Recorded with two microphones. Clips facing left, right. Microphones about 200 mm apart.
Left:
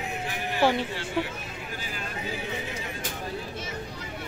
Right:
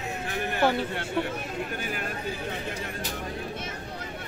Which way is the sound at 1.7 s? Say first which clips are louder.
Right 4 dB; 60° right (ahead or behind).